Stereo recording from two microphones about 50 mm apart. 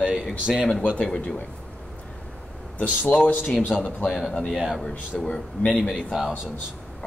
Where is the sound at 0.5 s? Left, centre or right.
Centre.